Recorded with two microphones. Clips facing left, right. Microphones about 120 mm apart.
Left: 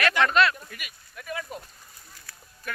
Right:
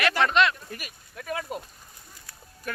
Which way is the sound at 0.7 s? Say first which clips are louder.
Right 4 dB; 35° right (ahead or behind).